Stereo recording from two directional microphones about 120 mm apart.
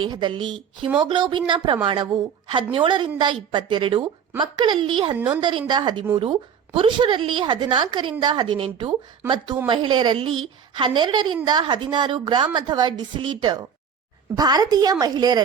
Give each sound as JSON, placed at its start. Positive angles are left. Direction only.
{"t": 0.0, "sound": "a woman's voice", "side_deg": -40}